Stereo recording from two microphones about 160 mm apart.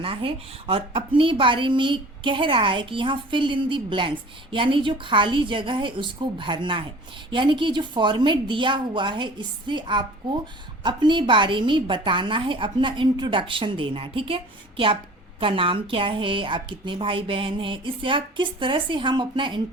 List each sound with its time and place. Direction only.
0.0 s a woman's voice: 35° right (ahead or behind)